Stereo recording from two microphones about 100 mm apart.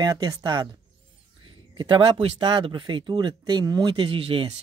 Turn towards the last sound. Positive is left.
turn(degrees=-65)  # may be behind; listen again after turning